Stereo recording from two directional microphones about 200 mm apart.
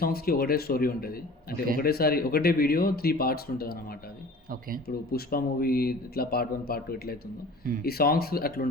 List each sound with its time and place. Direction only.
0.0 s speech: 50° left (ahead or behind)
5.1 s speech: 50° left (ahead or behind)